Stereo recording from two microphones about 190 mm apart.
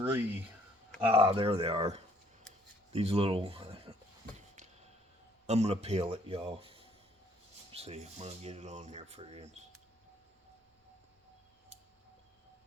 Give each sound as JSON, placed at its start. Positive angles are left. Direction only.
{"t": 0.0, "sound": "speech", "side_deg": -10}
{"t": 1.1, "sound": "speech", "side_deg": -30}
{"t": 5.5, "sound": "speech", "side_deg": -35}